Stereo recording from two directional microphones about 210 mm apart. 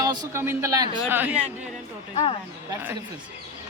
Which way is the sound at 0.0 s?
15° right (ahead or behind).